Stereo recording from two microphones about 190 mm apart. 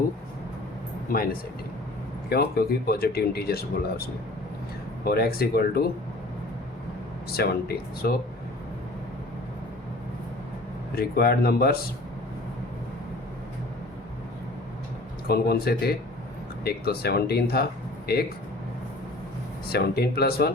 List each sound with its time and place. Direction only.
1.1 s speech: 50° left (ahead or behind)
7.3 s speech: 55° left (ahead or behind)
10.9 s speech: 55° left (ahead or behind)
15.3 s speech: 55° left (ahead or behind)
19.6 s speech: 55° left (ahead or behind)